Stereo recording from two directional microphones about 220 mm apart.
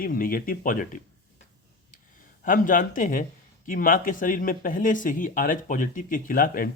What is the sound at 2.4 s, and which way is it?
Speech, 40° left (ahead or behind).